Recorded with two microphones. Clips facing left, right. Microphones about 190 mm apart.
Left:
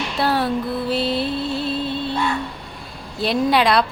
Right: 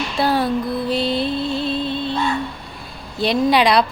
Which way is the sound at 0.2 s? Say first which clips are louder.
Right 2 dB; centre (ahead or behind).